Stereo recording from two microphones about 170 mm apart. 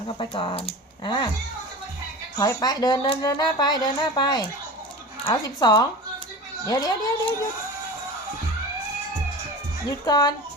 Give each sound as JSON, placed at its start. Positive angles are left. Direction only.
{"t": 0.2, "sound": "speech", "side_deg": 30}
{"t": 2.4, "sound": "speech", "side_deg": 25}
{"t": 9.9, "sound": "speech", "side_deg": 25}